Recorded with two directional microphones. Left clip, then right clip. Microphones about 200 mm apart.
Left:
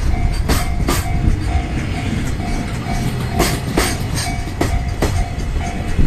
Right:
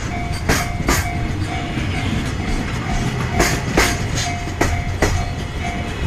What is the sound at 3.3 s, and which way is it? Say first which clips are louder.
Train: right 1 dB; 60° left (ahead or behind).